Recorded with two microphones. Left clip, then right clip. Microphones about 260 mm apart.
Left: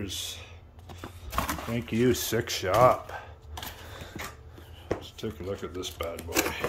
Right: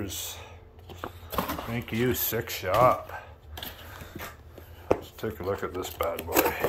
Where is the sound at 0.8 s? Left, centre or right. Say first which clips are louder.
Right 5 dB; centre.